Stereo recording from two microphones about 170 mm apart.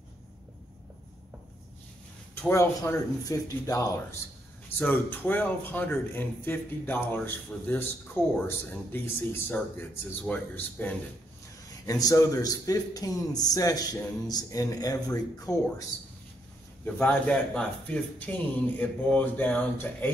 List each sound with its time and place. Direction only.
2.3 s a man's voice: 15° left (ahead or behind)
16.8 s speech: 10° left (ahead or behind)